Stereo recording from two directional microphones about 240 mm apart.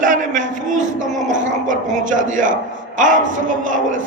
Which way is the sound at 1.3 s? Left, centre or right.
Right.